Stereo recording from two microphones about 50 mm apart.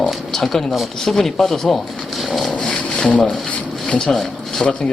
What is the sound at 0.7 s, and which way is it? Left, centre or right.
Speech, centre.